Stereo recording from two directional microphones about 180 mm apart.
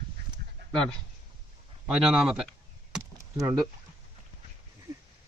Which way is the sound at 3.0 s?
15° right (ahead or behind).